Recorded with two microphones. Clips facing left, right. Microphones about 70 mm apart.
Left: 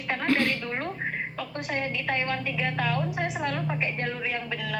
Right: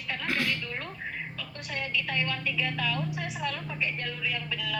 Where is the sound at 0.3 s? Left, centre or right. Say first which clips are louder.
Left 4 dB; left.